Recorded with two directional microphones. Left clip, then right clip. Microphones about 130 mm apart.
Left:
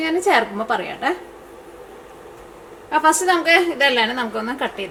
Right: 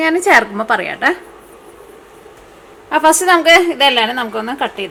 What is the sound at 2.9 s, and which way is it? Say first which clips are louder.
A woman's voice: right 5 dB; 30° right (ahead or behind).